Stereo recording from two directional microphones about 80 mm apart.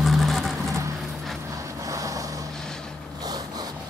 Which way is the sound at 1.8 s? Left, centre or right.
Right.